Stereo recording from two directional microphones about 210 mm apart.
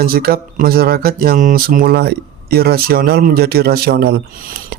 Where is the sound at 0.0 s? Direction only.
45° right (ahead or behind).